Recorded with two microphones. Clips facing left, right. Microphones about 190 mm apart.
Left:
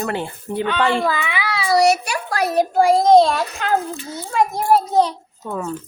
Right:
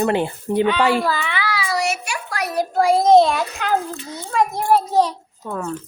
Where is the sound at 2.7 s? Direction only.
5° left (ahead or behind).